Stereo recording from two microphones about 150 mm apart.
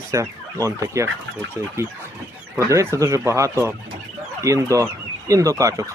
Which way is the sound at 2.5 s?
20° right (ahead or behind).